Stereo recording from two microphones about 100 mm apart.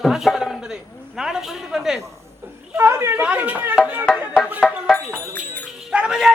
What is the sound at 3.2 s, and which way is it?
Speech, 15° right (ahead or behind).